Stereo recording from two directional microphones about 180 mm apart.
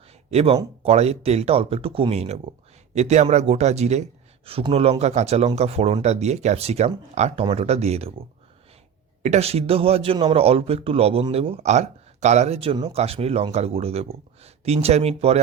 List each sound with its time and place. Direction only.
0.3 s a man's voice: 35° right (ahead or behind)
9.2 s a man's voice: 35° right (ahead or behind)